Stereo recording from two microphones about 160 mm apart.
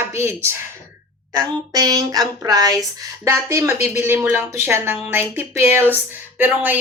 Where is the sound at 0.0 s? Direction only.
15° right (ahead or behind).